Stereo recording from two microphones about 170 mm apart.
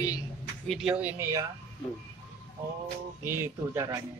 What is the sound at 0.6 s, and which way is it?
Speech, centre (ahead or behind).